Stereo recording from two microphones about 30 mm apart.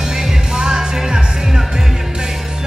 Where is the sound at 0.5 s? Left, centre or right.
Right.